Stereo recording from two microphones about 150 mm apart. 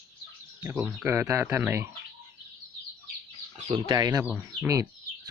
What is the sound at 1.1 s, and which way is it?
Speech, 15° right (ahead or behind).